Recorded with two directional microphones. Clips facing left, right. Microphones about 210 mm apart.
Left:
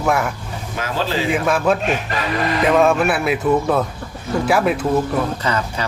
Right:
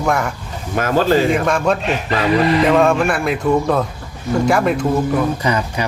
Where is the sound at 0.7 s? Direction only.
50° right (ahead or behind).